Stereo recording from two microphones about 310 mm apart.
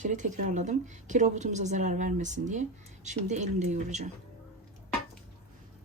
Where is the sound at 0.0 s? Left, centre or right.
Right.